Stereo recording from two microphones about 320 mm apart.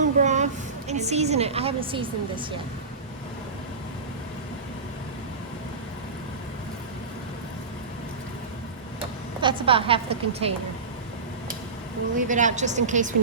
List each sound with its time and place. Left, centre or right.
0.0 s a sound: right
0.9 s a woman's voice: right
9.0 s speech: centre
12.1 s a woman's voice: right